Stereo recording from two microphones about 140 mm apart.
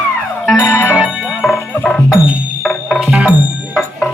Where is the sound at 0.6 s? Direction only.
15° left (ahead or behind).